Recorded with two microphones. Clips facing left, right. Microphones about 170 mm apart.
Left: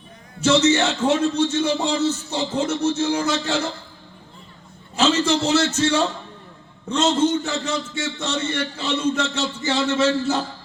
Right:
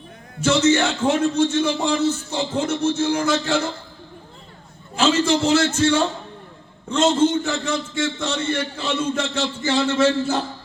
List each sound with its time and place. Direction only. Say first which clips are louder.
0.3 s a man's voice: even; 50° right (ahead or behind)
4.9 s a man's voice: right 1 dB; 50° right (ahead or behind)